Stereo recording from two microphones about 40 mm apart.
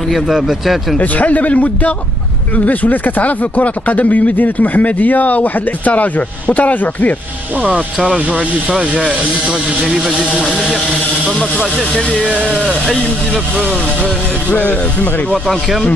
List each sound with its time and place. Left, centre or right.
0.1 s speech: centre
0.9 s speech: left
8.3 s speech: right; by 10.2 s centre
14.5 s speech: left
15.3 s speech: centre